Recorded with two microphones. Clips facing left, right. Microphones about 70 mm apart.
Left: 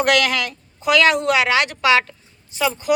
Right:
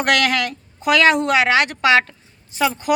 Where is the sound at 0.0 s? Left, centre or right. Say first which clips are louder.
Even; right.